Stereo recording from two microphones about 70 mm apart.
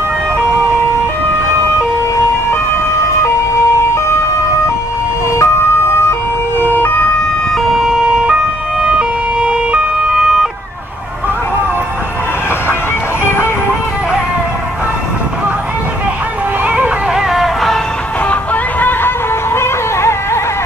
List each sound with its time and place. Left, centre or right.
5.4 s ambulance: left
7.5 s ambulance: centre
8.1 s ambulance: centre
16.6 s music: right
17.1 s music: centre
18.3 s music: left